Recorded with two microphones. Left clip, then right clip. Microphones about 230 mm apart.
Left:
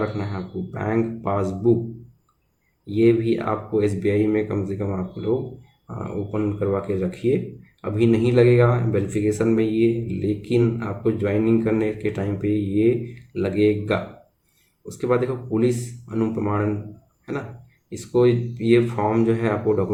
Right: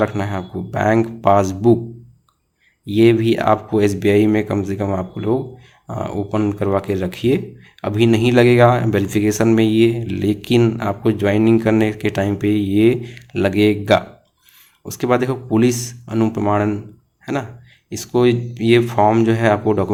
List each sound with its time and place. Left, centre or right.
0.0 s speech: right
2.8 s speech: right
6.3 s speech: right
17.8 s speech: right